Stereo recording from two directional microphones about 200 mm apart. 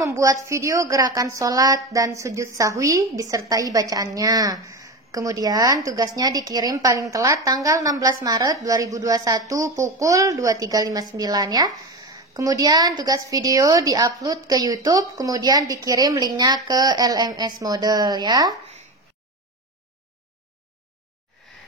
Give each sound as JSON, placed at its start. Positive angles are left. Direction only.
{"t": 0.0, "sound": "a woman's voice", "side_deg": -15}